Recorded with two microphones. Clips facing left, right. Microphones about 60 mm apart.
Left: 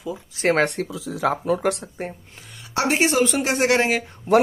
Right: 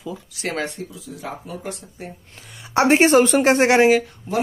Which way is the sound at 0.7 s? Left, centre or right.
Left.